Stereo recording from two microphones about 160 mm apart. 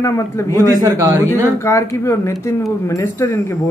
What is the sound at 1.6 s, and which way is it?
Speech, 15° left (ahead or behind).